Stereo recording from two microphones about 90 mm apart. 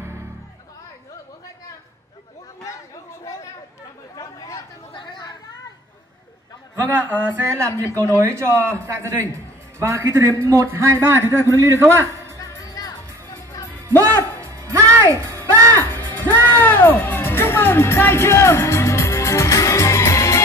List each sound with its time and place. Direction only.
4.1 s chatter: 45° left (ahead or behind)
4.9 s chatter: 60° left (ahead or behind)
6.7 s speech: 25° right (ahead or behind)
7.7 s speech: 30° left (ahead or behind)
8.9 s a man's voice: 30° right (ahead or behind)
12.4 s music: 40° left (ahead or behind)
13.8 s music: 35° right (ahead or behind)
15.7 s music: 20° left (ahead or behind)